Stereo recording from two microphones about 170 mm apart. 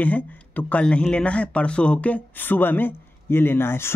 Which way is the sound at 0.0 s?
10° left (ahead or behind).